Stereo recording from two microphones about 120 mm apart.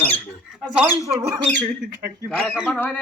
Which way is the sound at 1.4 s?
10° left (ahead or behind).